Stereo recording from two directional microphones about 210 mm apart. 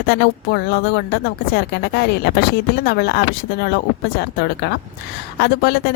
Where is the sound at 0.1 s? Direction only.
50° left (ahead or behind).